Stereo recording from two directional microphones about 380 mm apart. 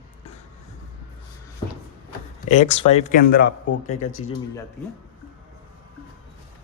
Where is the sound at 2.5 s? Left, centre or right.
Centre.